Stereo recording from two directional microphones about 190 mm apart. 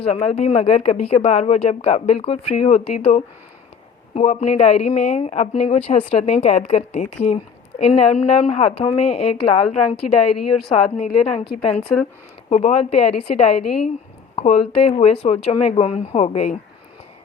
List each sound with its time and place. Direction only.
0.0 s speech: 30° left (ahead or behind)
12.5 s speech: 35° left (ahead or behind)